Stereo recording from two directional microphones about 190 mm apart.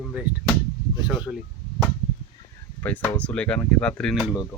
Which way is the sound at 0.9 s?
25° left (ahead or behind).